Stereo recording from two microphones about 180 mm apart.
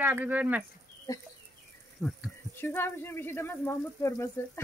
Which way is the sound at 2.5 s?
10° left (ahead or behind).